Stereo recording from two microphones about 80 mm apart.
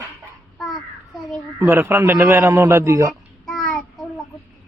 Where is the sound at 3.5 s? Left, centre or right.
Centre.